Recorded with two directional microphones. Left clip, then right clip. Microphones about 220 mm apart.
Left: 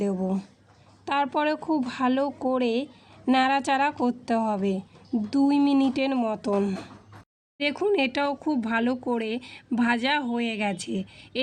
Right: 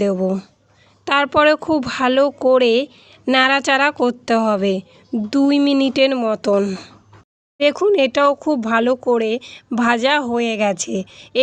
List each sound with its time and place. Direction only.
0.0 s speech: 30° right (ahead or behind)